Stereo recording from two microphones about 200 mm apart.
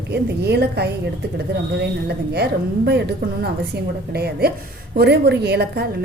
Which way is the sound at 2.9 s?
55° right (ahead or behind).